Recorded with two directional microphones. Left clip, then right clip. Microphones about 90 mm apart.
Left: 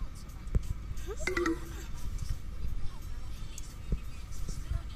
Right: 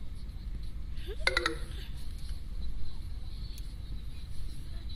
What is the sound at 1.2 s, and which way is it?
Speech, 55° right (ahead or behind).